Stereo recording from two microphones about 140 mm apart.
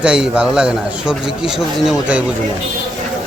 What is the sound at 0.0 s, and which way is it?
A man's voice, 5° right (ahead or behind).